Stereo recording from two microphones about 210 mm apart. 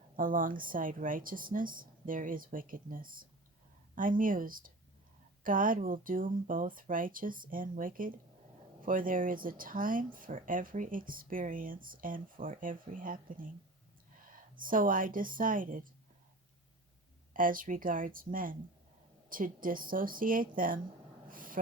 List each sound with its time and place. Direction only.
0.2 s speech: 40° right (ahead or behind)
14.5 s speech: 40° right (ahead or behind)
17.3 s speech: 40° right (ahead or behind)
21.2 s a sound: 40° right (ahead or behind)